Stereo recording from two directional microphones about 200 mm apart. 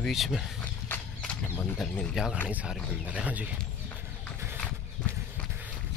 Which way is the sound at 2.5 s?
5° right (ahead or behind).